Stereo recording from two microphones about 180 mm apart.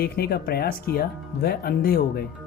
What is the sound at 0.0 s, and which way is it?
Speech, 60° left (ahead or behind).